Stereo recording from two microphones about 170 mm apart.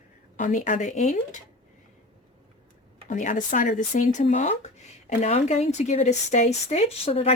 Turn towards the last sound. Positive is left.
turn(degrees=35)  # may be behind; listen again after turning